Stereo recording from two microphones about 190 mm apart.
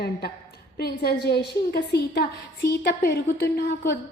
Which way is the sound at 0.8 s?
55° left (ahead or behind).